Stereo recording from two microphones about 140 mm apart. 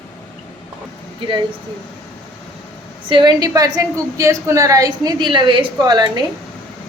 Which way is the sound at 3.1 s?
30° right (ahead or behind).